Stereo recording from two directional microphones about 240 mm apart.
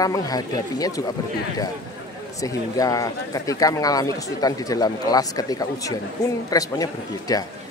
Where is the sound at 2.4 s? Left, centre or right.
Centre.